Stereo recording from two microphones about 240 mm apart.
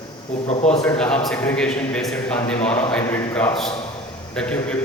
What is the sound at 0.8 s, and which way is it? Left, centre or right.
A man's voice, centre.